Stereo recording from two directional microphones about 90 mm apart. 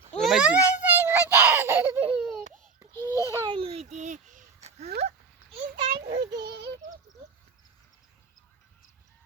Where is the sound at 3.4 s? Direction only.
75° right (ahead or behind).